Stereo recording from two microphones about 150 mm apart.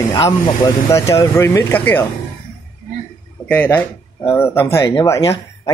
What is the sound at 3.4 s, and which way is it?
Speech, 10° left (ahead or behind).